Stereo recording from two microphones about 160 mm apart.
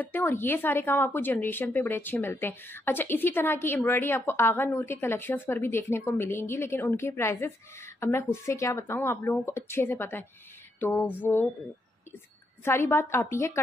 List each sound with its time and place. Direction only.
0.0 s speech: 10° left (ahead or behind)
12.6 s speech: 15° left (ahead or behind)